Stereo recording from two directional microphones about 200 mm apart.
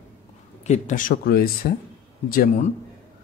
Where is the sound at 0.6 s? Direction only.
35° left (ahead or behind).